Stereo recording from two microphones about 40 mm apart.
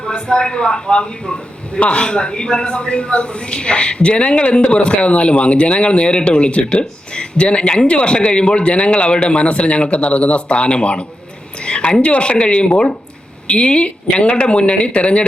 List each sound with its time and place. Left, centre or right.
0.0 s a man's voice: left
11.6 s a sound: left
12.0 s a man's voice: left